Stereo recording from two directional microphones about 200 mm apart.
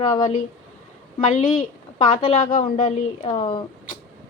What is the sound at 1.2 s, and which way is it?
Speech, 35° left (ahead or behind).